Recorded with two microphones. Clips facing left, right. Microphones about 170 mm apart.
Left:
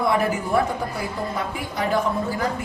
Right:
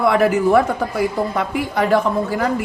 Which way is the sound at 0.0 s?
70° right (ahead or behind).